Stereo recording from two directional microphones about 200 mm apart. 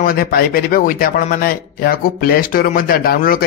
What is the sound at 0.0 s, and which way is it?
Speech, 45° left (ahead or behind).